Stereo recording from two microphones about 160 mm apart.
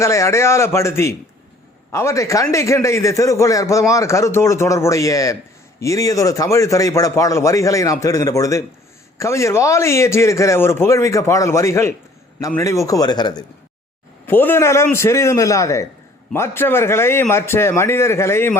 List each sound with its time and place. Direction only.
0.0 s a man's voice: 20° left (ahead or behind)
14.3 s a man's voice: 10° left (ahead or behind)